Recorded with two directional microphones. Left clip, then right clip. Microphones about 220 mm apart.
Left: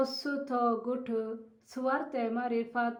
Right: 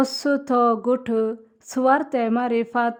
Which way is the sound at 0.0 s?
50° right (ahead or behind).